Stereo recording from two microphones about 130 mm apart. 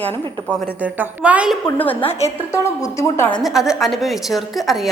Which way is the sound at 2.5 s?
25° left (ahead or behind).